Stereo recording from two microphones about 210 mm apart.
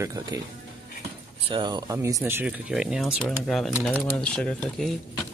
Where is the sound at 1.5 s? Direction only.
20° right (ahead or behind).